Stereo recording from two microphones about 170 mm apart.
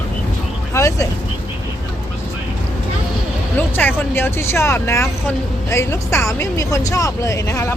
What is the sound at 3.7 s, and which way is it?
Vehicle, 10° left (ahead or behind).